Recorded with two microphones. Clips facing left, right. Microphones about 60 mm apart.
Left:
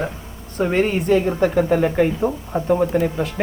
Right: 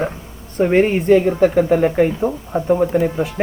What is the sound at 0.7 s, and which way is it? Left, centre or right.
Speech, right.